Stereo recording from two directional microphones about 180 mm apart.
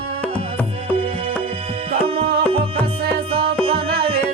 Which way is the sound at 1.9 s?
35° right (ahead or behind).